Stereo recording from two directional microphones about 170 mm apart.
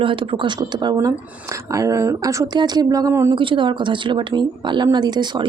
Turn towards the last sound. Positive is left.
turn(degrees=-25)  # may be behind; listen again after turning